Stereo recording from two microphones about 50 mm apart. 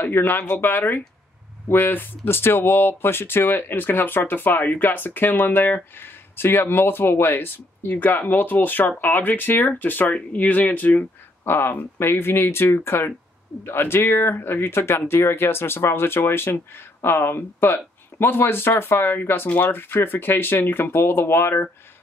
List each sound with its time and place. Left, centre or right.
0.0 s speech: left
11.4 s speech: left